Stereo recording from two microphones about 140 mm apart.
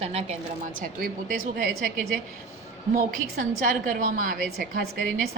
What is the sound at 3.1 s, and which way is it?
A woman's voice, 75° right (ahead or behind).